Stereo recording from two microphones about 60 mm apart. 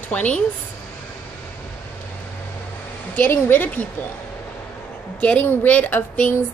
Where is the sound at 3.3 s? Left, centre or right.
Left.